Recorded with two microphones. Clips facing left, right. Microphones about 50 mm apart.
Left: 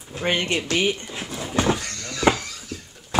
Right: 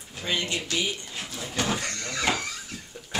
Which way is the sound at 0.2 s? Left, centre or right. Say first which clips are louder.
Left 6 dB; left.